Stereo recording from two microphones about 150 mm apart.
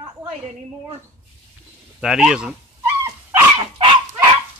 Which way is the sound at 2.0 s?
5° right (ahead or behind).